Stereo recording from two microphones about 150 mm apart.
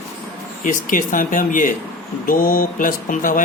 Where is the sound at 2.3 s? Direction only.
70° left (ahead or behind).